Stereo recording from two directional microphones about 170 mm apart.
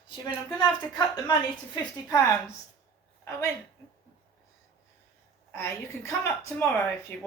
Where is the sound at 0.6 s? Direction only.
25° left (ahead or behind).